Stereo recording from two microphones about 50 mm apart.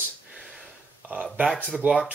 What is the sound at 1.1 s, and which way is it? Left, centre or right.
Speech, right.